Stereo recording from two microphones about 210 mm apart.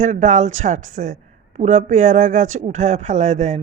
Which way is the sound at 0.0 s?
35° right (ahead or behind).